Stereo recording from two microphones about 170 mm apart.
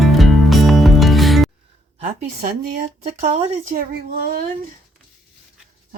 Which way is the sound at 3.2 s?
40° right (ahead or behind).